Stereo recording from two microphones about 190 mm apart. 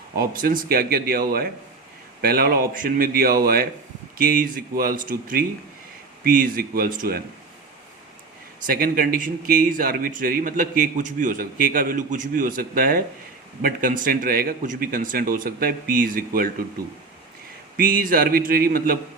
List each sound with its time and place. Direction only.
0.1 s a man's voice: 50° right (ahead or behind)
8.6 s a man's voice: 50° right (ahead or behind)
17.7 s a man's voice: 45° right (ahead or behind)